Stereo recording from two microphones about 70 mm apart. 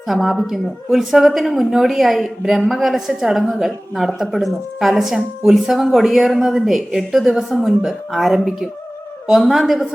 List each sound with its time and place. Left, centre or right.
0.1 s a woman's voice: centre